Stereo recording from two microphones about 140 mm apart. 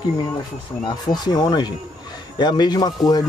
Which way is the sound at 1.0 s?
30° left (ahead or behind).